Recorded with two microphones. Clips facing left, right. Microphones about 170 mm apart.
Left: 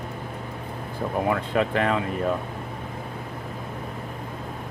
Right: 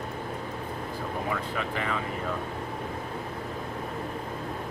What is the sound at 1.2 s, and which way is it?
Speech, 65° left (ahead or behind).